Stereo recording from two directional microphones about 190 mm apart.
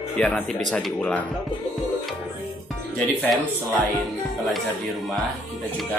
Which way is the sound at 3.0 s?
Centre (ahead or behind).